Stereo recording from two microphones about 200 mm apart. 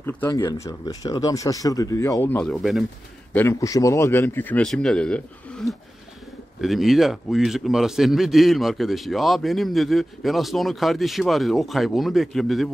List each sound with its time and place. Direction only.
0.0 s speech: 10° left (ahead or behind)
3.3 s a man's voice: 15° left (ahead or behind)